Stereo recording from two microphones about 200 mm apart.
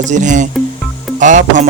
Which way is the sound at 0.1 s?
40° right (ahead or behind).